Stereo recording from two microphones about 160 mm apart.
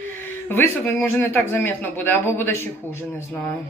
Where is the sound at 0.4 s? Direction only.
15° left (ahead or behind).